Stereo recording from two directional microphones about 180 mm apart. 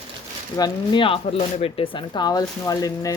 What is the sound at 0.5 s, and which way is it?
Speech, 25° left (ahead or behind).